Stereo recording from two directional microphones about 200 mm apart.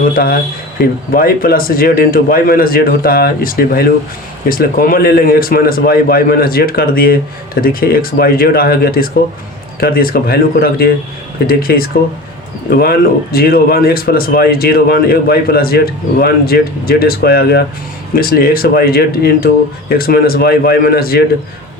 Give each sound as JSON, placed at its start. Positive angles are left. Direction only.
{"t": 0.0, "sound": "speech", "side_deg": 45}